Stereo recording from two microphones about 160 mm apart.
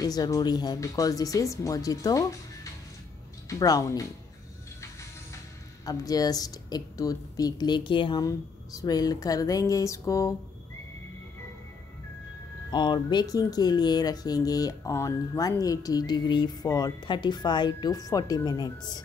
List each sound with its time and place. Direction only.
0.0 s speech: 25° left (ahead or behind)
5.9 s speech: 25° left (ahead or behind)
12.7 s speech: 30° left (ahead or behind)